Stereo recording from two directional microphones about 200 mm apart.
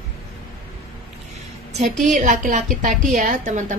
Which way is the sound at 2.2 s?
40° right (ahead or behind).